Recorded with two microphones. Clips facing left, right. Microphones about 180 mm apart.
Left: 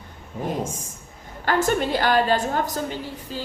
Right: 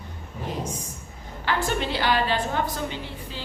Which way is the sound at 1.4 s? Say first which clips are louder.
Left 5 dB; 45° left (ahead or behind).